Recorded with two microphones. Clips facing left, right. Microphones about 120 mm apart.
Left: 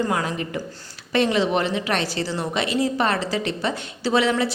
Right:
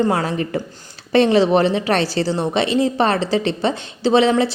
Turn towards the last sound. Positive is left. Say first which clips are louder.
# right 6 dB
turn(degrees=-25)  # may be behind; listen again after turning